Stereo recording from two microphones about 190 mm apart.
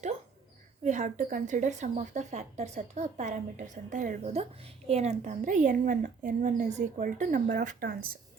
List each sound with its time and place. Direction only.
0.9 s a woman's voice: 40° right (ahead or behind)